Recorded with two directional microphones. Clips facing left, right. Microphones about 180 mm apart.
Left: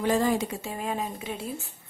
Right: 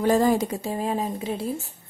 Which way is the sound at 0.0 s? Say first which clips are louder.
Right 4 dB; 40° right (ahead or behind).